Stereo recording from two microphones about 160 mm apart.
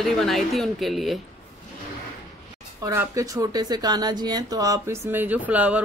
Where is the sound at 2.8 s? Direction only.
20° right (ahead or behind).